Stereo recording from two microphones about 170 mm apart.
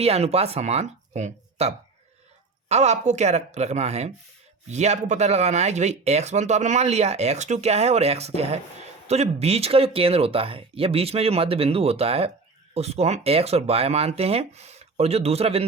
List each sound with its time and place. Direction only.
0.0 s speech: 40° right (ahead or behind)